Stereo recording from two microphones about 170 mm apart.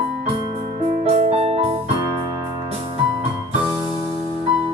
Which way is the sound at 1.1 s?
40° right (ahead or behind).